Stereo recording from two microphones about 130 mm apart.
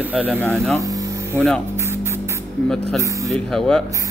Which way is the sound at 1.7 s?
20° right (ahead or behind).